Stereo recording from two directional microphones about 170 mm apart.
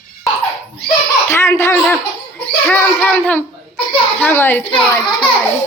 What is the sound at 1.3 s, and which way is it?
A woman's voice, 15° left (ahead or behind).